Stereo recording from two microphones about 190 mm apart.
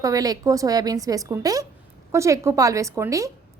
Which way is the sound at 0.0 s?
20° right (ahead or behind).